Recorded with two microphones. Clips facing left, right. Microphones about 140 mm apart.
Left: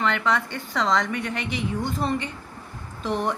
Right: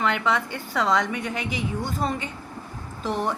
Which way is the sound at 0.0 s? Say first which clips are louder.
Even; 5° right (ahead or behind).